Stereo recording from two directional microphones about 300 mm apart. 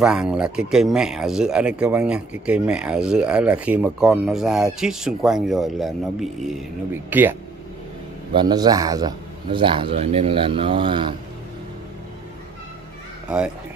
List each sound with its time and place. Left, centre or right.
0.0 s a man's voice: centre